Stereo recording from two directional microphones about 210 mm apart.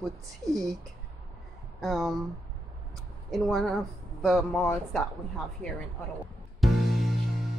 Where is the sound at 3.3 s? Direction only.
Centre (ahead or behind).